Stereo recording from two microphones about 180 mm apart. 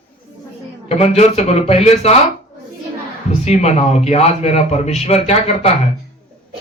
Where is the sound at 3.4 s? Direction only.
40° left (ahead or behind).